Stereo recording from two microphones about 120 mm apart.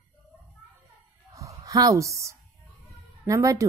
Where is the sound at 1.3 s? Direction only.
30° right (ahead or behind).